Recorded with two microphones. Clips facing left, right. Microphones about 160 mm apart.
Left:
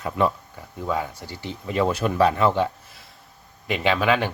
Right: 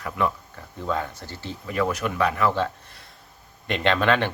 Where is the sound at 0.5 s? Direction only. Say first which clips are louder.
Left 1 dB; 10° left (ahead or behind); by 2.5 s 30° left (ahead or behind).